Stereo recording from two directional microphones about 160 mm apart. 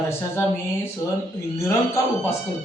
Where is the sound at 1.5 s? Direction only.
15° left (ahead or behind).